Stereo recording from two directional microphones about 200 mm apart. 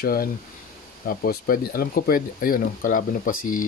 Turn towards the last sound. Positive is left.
turn(degrees=45)  # may be behind; listen again after turning